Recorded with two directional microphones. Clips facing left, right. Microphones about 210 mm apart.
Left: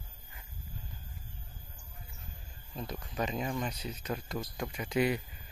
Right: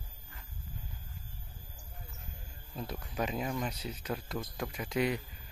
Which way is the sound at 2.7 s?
5° right (ahead or behind).